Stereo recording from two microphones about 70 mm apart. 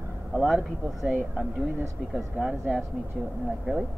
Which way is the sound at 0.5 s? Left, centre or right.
Centre.